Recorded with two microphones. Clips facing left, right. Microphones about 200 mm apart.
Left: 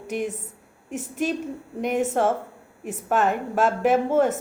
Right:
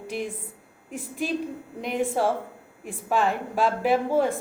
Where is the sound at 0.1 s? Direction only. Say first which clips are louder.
Left 4 dB; 40° left (ahead or behind).